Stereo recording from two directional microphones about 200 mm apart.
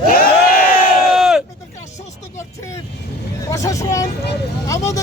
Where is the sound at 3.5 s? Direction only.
15° left (ahead or behind).